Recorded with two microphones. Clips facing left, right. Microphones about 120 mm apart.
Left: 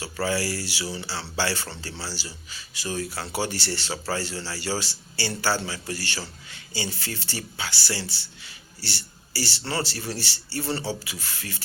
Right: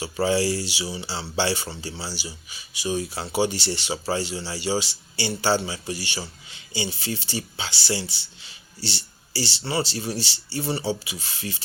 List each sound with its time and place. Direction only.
0.0 s a man's voice: 20° right (ahead or behind)